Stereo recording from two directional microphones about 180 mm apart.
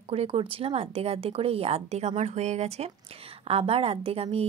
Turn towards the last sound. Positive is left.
turn(degrees=-35)  # may be behind; listen again after turning